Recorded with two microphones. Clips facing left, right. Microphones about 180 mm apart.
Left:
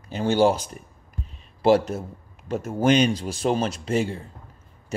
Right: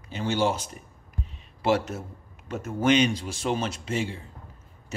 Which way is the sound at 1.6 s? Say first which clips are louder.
Left 6 dB; 35° left (ahead or behind).